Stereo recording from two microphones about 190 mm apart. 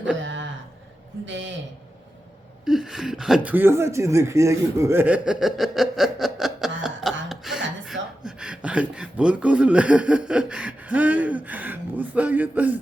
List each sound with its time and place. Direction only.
0.2 s a sound: 75° right (ahead or behind)
1.2 s a man's voice: 70° right (ahead or behind)
2.6 s speech: centre (ahead or behind)